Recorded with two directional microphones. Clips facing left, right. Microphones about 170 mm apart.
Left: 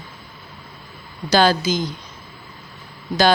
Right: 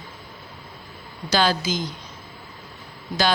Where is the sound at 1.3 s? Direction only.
45° left (ahead or behind).